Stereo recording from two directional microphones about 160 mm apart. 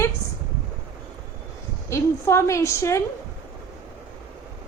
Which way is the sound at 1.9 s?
15° left (ahead or behind).